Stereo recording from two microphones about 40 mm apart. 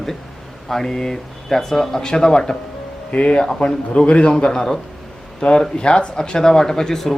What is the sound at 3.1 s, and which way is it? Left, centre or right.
A man's voice, left.